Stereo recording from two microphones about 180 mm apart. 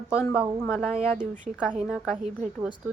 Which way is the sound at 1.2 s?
45° right (ahead or behind).